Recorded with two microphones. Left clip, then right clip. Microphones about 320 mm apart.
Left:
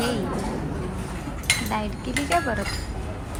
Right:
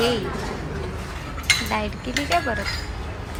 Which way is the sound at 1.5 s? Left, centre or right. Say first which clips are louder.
Right 4 dB; left.